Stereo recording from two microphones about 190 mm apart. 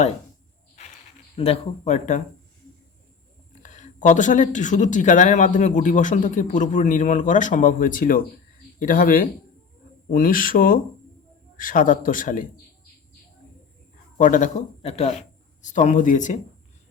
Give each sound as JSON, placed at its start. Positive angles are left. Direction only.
{"t": 1.4, "sound": "speech", "side_deg": 35}
{"t": 3.5, "sound": "a man's voice", "side_deg": 40}
{"t": 14.2, "sound": "speech", "side_deg": 45}